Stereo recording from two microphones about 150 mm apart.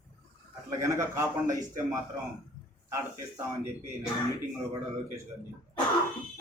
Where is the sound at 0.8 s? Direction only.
20° right (ahead or behind).